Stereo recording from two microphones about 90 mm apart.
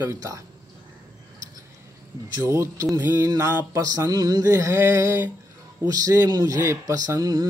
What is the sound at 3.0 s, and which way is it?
Mantra, 20° right (ahead or behind).